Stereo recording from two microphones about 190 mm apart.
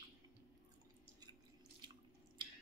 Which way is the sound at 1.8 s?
25° right (ahead or behind).